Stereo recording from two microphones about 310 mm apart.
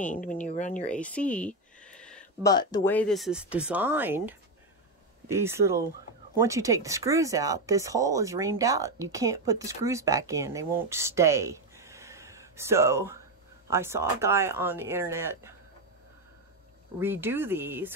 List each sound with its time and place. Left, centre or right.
0.1 s speech: left
0.7 s speech: centre
17.0 s speech: centre